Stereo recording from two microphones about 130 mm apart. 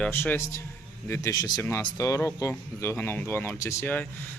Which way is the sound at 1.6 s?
15° left (ahead or behind).